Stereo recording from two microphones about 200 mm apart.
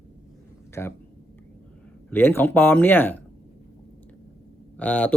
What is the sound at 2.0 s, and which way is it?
Speech, 10° left (ahead or behind).